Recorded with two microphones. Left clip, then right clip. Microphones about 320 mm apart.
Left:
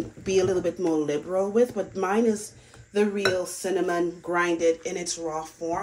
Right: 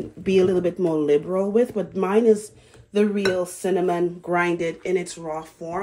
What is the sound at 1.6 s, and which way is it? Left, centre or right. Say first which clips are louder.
Speech: right 2 dB; centre.